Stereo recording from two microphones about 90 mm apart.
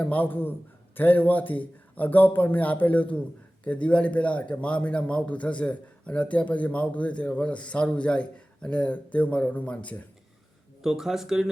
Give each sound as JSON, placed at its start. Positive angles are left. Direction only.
{"t": 0.0, "sound": "a man's voice", "side_deg": 20}
{"t": 10.8, "sound": "speech", "side_deg": -5}